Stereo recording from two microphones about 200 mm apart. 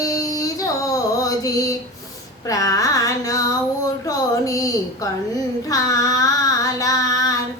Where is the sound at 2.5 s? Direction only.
15° left (ahead or behind).